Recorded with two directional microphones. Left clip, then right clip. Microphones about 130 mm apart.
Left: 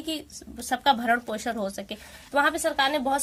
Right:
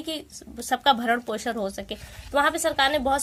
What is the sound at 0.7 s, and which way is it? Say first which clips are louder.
A woman's voice: right 1 dB; 30° right (ahead or behind).